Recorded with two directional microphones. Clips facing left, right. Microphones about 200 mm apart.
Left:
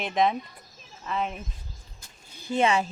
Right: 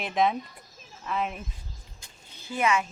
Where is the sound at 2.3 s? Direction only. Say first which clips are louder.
Left 7 dB; 15° left (ahead or behind).